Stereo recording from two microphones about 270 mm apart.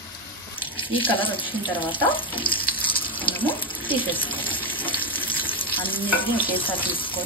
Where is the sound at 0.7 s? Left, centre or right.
Centre.